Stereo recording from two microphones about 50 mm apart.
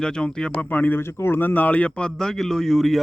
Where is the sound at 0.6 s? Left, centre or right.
Left.